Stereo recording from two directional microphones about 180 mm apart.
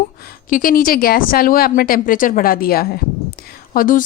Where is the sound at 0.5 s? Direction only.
50° left (ahead or behind).